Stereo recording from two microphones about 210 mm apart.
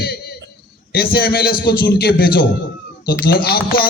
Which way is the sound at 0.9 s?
45° left (ahead or behind).